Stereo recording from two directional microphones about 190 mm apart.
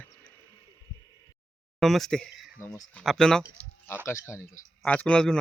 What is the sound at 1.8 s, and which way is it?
Speech, centre (ahead or behind).